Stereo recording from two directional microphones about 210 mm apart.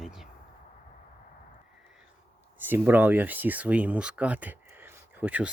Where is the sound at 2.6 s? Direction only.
10° right (ahead or behind).